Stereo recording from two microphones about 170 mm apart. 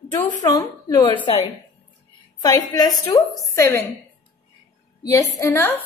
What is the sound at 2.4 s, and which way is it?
A woman's voice, 20° left (ahead or behind).